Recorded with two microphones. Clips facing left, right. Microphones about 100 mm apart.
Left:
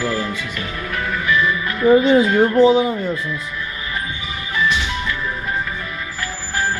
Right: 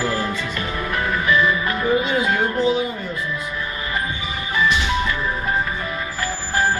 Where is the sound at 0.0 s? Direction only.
35° right (ahead or behind).